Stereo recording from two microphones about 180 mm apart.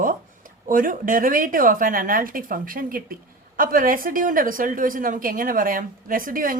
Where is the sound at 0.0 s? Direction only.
50° right (ahead or behind).